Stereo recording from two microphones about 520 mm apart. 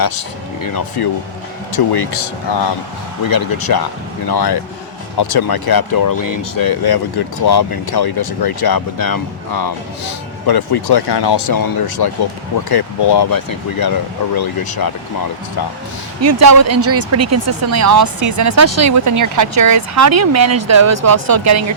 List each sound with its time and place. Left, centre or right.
0.0 s speech: left
16.2 s speech: right